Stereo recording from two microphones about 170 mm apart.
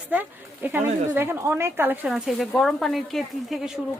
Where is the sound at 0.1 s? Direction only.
10° right (ahead or behind).